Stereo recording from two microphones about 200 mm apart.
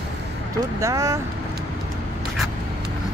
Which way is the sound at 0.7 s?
15° right (ahead or behind).